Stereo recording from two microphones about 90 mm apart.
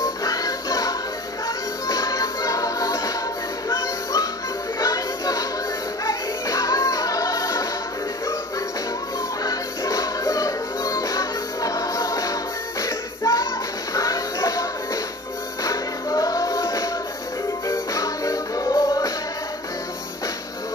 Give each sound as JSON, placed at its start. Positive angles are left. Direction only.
{"t": 0.2, "sound": "music", "side_deg": 40}
{"t": 9.4, "sound": "music", "side_deg": 40}